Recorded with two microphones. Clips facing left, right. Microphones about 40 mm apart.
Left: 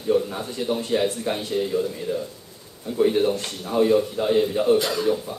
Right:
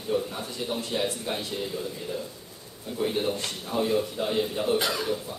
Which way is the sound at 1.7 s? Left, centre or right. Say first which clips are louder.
Left 9 dB; left.